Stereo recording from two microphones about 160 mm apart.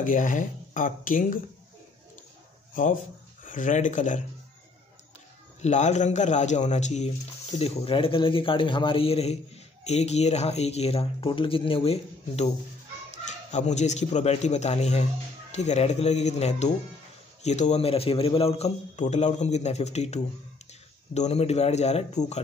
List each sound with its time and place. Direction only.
0.0 s speech: 55° left (ahead or behind)
2.7 s a man's voice: 55° left (ahead or behind)
5.6 s a man's voice: 45° left (ahead or behind)